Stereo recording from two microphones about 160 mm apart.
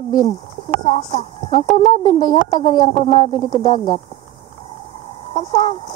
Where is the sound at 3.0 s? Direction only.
40° left (ahead or behind).